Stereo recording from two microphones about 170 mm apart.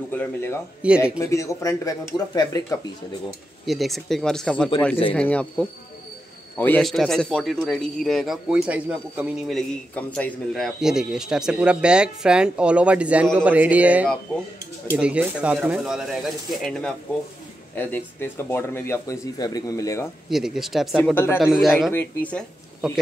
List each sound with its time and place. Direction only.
0.1 s speech: 10° left (ahead or behind)
0.8 s a man's voice: 5° right (ahead or behind)
1.2 s speech: 20° left (ahead or behind)
3.6 s a man's voice: centre (ahead or behind)
6.8 s a man's voice: centre (ahead or behind)
9.6 s a man's voice: 5° left (ahead or behind)
17.7 s speech: 10° left (ahead or behind)
20.2 s a man's voice: centre (ahead or behind)
21.0 s speech: 15° left (ahead or behind)
21.4 s a man's voice: centre (ahead or behind)